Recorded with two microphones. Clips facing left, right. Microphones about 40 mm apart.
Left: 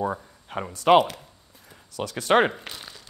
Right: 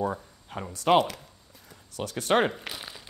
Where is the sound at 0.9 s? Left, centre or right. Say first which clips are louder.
Left 4 dB; centre.